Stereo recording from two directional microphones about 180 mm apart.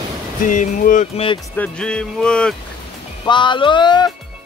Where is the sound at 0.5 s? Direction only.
45° left (ahead or behind).